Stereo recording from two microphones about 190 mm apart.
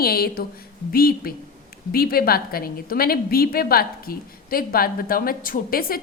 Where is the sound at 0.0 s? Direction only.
55° left (ahead or behind).